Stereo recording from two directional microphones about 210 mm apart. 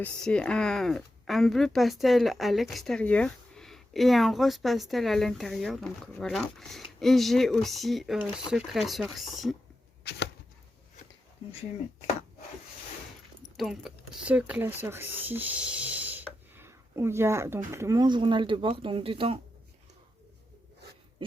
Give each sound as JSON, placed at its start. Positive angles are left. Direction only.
{"t": 0.0, "sound": "speech", "side_deg": 5}
{"t": 10.0, "sound": "chopping", "side_deg": 50}
{"t": 13.6, "sound": "speech", "side_deg": 0}
{"t": 21.2, "sound": "a sound", "side_deg": -25}